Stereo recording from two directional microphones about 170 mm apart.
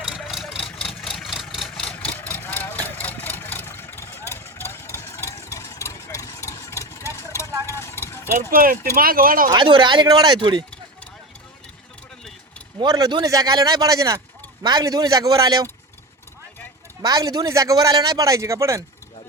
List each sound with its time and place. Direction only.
0.1 s vehicle: centre (ahead or behind)
4.3 s engine: 15° left (ahead or behind)
7.7 s vehicle: 15° left (ahead or behind)
8.4 s speech: 55° right (ahead or behind)
9.5 s a man's voice: 25° right (ahead or behind)
12.8 s a man's voice: 25° right (ahead or behind)
17.0 s a man's voice: 25° right (ahead or behind)